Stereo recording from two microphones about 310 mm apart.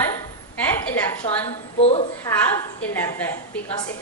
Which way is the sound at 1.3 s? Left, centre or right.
Centre.